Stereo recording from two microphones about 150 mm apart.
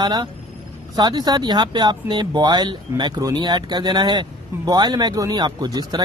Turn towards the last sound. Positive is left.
turn(degrees=-25)  # may be behind; listen again after turning